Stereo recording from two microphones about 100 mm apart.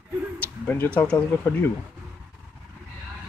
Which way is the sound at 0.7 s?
15° left (ahead or behind).